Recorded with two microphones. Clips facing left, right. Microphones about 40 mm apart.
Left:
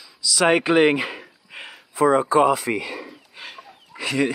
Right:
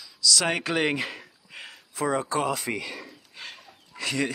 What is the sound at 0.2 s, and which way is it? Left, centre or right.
Speech, centre.